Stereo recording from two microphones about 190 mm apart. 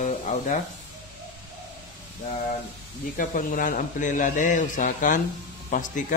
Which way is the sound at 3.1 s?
45° left (ahead or behind).